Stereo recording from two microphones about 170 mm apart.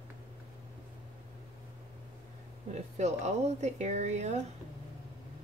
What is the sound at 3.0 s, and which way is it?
Speech, 40° right (ahead or behind).